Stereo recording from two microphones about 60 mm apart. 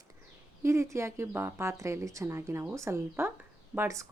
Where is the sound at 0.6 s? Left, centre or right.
Right.